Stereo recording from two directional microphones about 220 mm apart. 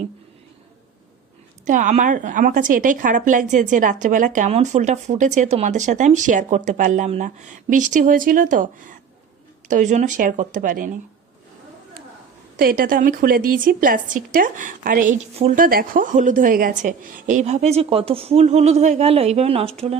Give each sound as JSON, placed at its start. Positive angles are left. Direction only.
{"t": 1.6, "sound": "a woman's voice", "side_deg": -35}
{"t": 12.5, "sound": "a woman's voice", "side_deg": -40}